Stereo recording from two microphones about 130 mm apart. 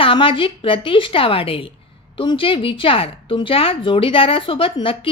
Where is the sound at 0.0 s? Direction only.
45° left (ahead or behind).